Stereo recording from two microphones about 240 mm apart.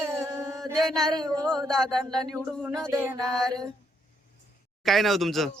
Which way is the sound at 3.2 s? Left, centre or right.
Centre.